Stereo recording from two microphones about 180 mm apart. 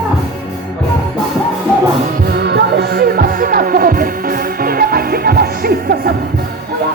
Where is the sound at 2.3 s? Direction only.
70° right (ahead or behind).